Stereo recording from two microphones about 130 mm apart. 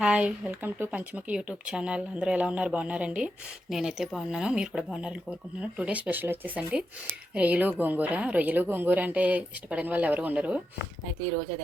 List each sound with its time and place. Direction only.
0.0 s speech: 10° right (ahead or behind)